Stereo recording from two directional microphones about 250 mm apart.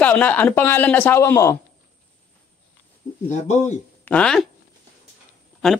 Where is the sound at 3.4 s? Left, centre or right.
Left.